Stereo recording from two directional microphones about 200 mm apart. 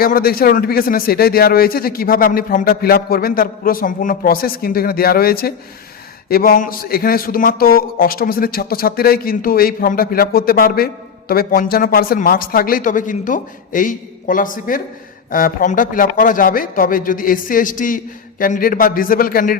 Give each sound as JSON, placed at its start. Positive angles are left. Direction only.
{"t": 0.0, "sound": "speech", "side_deg": 45}